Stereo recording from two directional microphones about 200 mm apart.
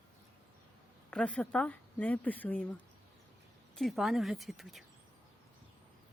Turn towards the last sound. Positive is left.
turn(degrees=0)  # may be behind; listen again after turning